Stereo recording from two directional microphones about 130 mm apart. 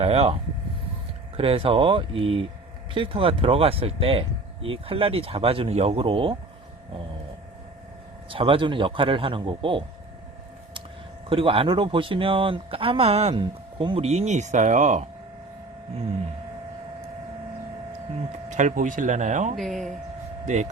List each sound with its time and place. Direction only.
0.0 s speech: 50° right (ahead or behind)
1.4 s speech: 45° right (ahead or behind)
8.3 s a man's voice: 40° right (ahead or behind)
11.3 s speech: 45° right (ahead or behind); by 15.0 s 70° right (ahead or behind)
18.4 s speech: 70° right (ahead or behind)
19.5 s speech: centre (ahead or behind)
20.4 s speech: 65° right (ahead or behind)